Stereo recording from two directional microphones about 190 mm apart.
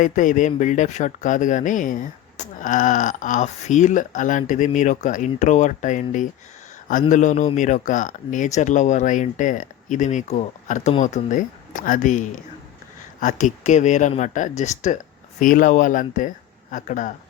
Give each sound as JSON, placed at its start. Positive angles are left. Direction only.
{"t": 0.0, "sound": "speech", "side_deg": 40}